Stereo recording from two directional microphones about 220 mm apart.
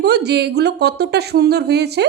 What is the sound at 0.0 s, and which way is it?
A woman's voice, 50° right (ahead or behind).